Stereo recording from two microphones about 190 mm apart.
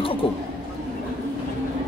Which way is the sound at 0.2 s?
30° left (ahead or behind).